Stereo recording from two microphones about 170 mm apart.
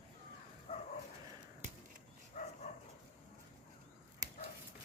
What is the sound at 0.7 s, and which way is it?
Bow-wow, 40° left (ahead or behind).